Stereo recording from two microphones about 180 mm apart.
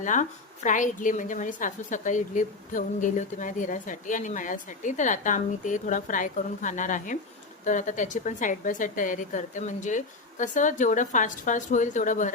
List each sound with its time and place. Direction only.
0.0 s a woman's voice: 45° left (ahead or behind)